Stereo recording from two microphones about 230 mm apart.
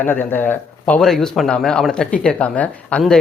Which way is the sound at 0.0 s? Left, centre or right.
Centre.